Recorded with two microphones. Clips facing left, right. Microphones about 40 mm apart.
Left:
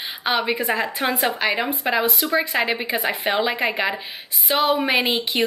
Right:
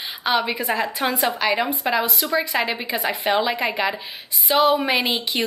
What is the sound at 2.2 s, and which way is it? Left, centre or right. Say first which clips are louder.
Speech: left 1 dB; left.